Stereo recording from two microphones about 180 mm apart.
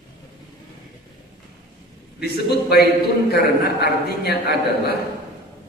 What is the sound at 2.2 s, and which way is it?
A man's voice, 60° left (ahead or behind).